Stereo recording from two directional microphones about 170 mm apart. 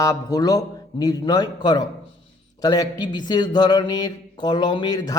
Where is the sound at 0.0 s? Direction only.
20° left (ahead or behind).